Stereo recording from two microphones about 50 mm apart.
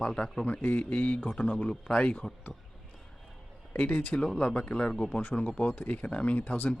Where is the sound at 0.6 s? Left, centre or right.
Left.